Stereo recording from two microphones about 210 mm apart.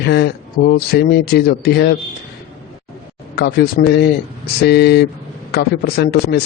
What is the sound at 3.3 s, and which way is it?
A man's voice, 50° left (ahead or behind).